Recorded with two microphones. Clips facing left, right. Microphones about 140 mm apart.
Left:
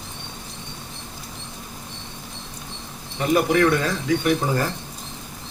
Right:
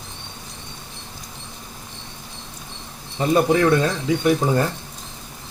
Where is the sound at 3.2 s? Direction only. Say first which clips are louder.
Right 1 dB; 25° right (ahead or behind).